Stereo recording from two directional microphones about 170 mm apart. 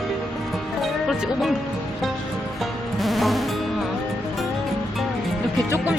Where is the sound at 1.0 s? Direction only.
Centre (ahead or behind).